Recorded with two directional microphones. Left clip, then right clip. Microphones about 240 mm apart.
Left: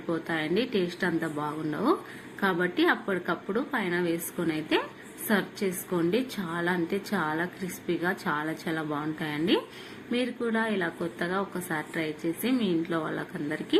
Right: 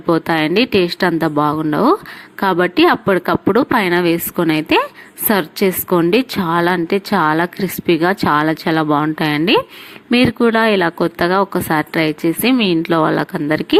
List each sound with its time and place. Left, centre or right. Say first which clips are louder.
0.1 s a woman's voice: right 15 dB; right